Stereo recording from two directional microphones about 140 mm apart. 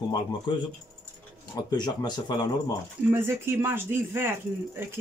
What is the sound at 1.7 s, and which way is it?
Speech, 30° left (ahead or behind).